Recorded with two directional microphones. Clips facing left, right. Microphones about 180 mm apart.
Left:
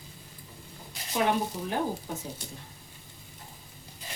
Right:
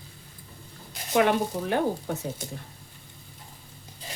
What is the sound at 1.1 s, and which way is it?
Speech, 70° right (ahead or behind).